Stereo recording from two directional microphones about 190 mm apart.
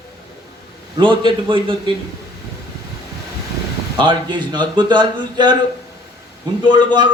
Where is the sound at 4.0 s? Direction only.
25° right (ahead or behind).